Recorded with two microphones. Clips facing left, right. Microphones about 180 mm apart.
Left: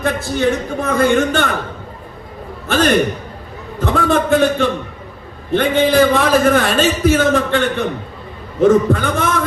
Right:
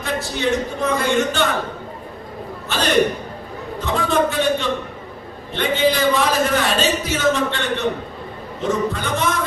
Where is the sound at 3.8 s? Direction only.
55° left (ahead or behind).